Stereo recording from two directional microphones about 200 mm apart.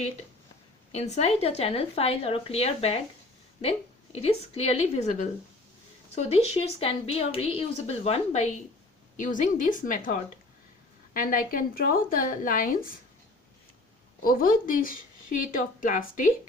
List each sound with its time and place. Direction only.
0.9 s speech: 35° left (ahead or behind)
14.3 s speech: 45° left (ahead or behind)